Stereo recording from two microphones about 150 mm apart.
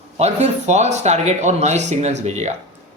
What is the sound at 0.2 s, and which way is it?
Speech, 45° right (ahead or behind).